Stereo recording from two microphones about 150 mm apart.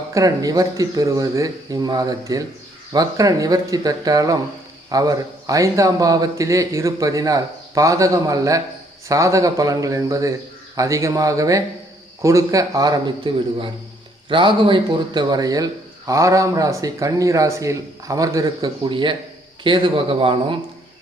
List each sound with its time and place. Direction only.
0.1 s speech: 20° right (ahead or behind)